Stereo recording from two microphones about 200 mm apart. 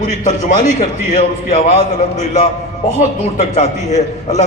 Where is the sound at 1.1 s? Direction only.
35° left (ahead or behind).